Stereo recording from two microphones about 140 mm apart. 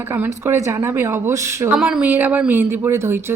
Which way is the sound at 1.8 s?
5° right (ahead or behind).